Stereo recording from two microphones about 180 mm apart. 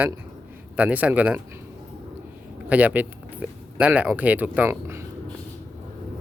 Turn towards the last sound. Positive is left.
turn(degrees=-15)  # may be behind; listen again after turning